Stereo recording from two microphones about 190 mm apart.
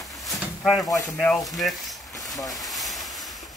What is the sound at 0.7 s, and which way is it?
Speech, 20° left (ahead or behind).